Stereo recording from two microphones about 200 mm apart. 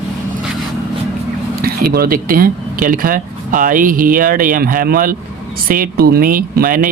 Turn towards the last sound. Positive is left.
turn(degrees=-45)  # may be behind; listen again after turning